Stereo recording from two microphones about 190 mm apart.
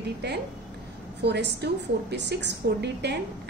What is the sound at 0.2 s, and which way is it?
A woman's voice, 60° right (ahead or behind).